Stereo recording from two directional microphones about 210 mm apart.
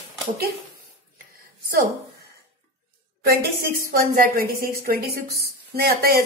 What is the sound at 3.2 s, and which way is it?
Speech, 45° right (ahead or behind).